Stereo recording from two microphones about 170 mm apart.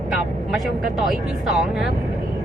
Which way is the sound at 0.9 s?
Centre (ahead or behind).